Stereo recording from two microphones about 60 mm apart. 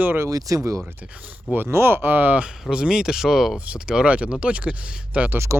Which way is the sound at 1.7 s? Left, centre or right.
Right.